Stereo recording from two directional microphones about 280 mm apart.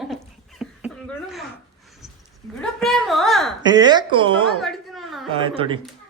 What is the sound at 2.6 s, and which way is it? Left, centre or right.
Speech, centre.